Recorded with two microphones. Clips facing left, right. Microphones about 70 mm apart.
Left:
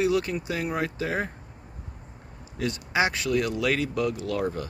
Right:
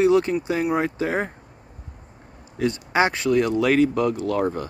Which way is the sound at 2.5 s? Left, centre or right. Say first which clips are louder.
Right 5 dB; right.